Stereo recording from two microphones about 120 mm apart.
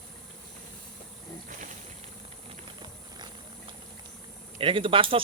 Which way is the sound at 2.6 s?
40° right (ahead or behind).